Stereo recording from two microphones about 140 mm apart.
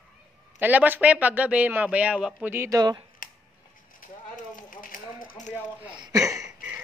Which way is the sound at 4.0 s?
75° left (ahead or behind).